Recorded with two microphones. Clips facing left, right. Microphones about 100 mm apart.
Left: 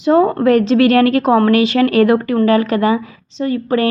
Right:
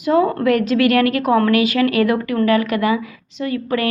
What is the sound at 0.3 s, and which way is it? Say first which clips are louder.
Speech: left 4 dB; 30° left (ahead or behind).